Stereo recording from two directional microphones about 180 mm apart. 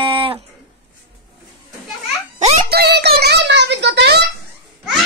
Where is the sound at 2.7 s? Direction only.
65° right (ahead or behind).